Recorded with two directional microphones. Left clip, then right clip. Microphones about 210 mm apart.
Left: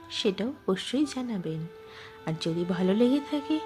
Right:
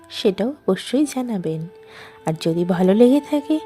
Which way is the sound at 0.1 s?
35° right (ahead or behind).